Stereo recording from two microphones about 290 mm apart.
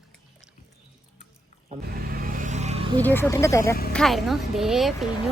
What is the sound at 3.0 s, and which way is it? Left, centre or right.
Speech, centre.